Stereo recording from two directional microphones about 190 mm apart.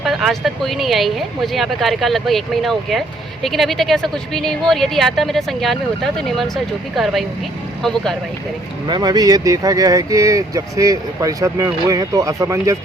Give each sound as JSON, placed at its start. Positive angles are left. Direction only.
{"t": 0.0, "sound": "speech", "side_deg": 0}
{"t": 8.9, "sound": "speech", "side_deg": -20}